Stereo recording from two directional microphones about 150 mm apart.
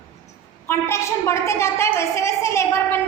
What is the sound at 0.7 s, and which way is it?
A woman's voice, 15° left (ahead or behind).